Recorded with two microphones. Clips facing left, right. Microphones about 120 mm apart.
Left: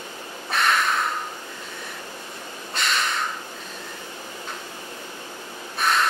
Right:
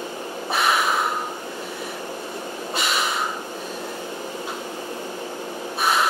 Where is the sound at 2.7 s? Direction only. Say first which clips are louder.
Right 1 dB; 5° right (ahead or behind).